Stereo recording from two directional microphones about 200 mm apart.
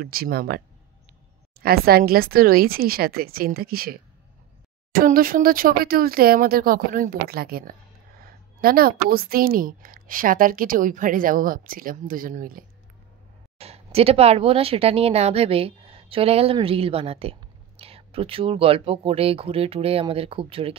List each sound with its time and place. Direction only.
0.0 s a woman's voice: 50° right (ahead or behind)
1.6 s a woman's voice: 50° right (ahead or behind)
13.6 s speech: 30° right (ahead or behind)